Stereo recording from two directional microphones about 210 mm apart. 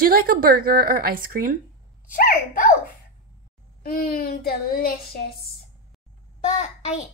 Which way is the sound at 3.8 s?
45° left (ahead or behind).